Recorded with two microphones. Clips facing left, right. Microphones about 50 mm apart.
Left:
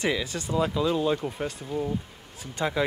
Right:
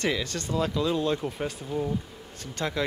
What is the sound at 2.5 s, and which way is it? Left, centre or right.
Speech, centre.